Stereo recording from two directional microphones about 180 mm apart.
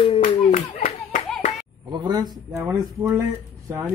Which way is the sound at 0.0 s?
35° left (ahead or behind).